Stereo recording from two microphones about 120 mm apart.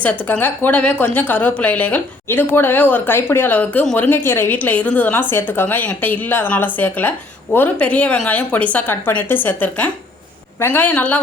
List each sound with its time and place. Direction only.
0.0 s speech: 15° left (ahead or behind)